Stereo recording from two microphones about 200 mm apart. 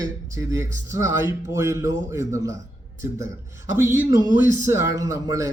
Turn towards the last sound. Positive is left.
turn(degrees=-15)  # may be behind; listen again after turning